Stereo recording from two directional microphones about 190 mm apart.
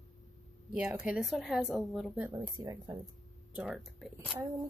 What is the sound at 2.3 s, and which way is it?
Speech, 20° right (ahead or behind).